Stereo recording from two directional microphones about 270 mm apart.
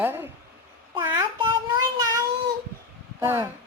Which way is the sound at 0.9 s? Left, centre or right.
Centre.